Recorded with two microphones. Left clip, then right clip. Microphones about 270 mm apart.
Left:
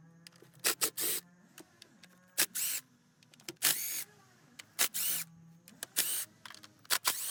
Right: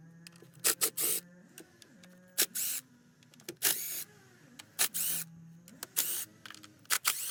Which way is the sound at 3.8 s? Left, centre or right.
Centre.